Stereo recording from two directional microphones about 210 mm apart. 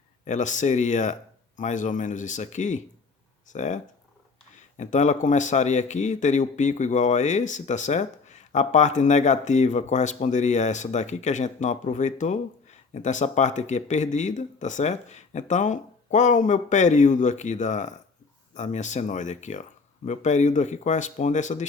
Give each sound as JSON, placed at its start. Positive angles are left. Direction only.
{"t": 0.3, "sound": "speech", "side_deg": 35}
{"t": 4.8, "sound": "speech", "side_deg": 35}